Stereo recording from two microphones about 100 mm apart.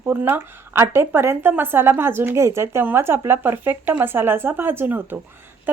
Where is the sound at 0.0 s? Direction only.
20° right (ahead or behind).